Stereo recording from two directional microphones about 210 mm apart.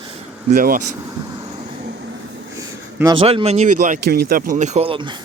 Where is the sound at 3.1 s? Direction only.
25° right (ahead or behind).